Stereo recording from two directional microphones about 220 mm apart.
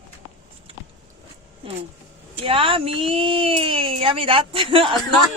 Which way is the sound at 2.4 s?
25° right (ahead or behind).